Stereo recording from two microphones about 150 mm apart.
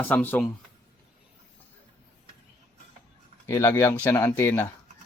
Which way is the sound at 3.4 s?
20° left (ahead or behind).